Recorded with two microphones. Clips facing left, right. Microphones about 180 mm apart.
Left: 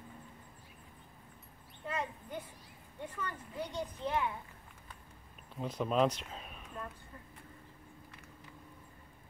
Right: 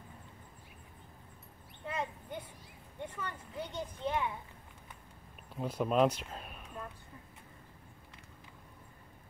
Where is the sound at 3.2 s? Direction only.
25° right (ahead or behind).